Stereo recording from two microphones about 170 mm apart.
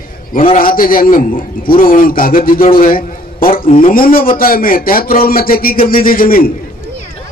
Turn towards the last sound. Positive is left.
turn(degrees=55)  # may be behind; listen again after turning